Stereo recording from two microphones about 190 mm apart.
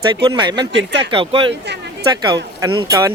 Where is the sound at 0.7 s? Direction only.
65° right (ahead or behind).